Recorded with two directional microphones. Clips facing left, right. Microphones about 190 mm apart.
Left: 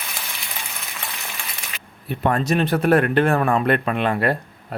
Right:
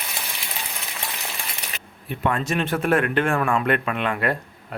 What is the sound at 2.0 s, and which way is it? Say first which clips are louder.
Speech: left 4 dB; 40° left (ahead or behind).